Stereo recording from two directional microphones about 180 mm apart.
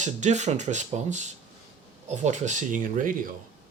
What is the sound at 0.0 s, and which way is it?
Speech, 40° right (ahead or behind).